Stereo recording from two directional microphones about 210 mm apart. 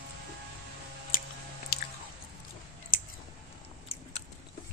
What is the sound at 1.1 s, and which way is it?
Chewing, 40° left (ahead or behind).